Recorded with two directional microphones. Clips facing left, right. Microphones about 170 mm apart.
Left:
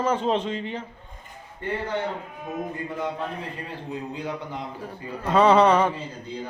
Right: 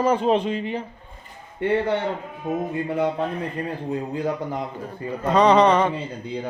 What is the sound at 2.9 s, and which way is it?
Speech, 65° right (ahead or behind).